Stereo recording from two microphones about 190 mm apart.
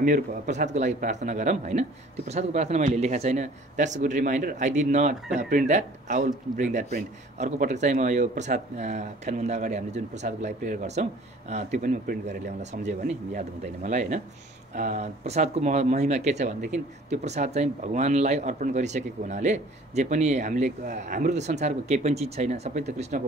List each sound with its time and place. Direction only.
0.0 s speech: 45° right (ahead or behind)